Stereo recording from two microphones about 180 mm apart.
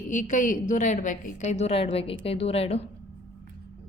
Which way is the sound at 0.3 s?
45° left (ahead or behind).